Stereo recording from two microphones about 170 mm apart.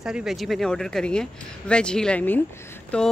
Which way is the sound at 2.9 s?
5° left (ahead or behind).